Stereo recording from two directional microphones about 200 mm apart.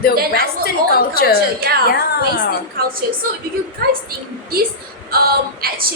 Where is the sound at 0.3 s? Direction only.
50° left (ahead or behind).